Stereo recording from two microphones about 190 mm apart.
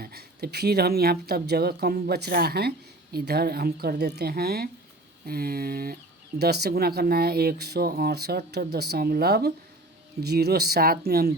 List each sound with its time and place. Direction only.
0.0 s speech: 55° right (ahead or behind)